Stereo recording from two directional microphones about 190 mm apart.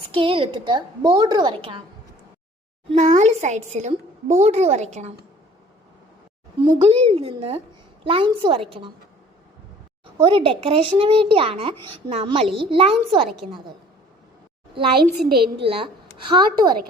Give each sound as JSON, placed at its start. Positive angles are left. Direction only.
{"t": 0.1, "sound": "a woman's voice", "side_deg": -25}
{"t": 2.9, "sound": "speech", "side_deg": -40}
{"t": 6.6, "sound": "a woman's voice", "side_deg": -30}
{"t": 10.2, "sound": "a woman's voice", "side_deg": -30}
{"t": 15.3, "sound": "a woman's voice", "side_deg": -60}
{"t": 16.3, "sound": "a woman's voice", "side_deg": -20}